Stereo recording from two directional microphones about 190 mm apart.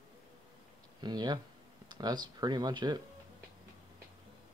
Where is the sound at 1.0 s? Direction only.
20° right (ahead or behind).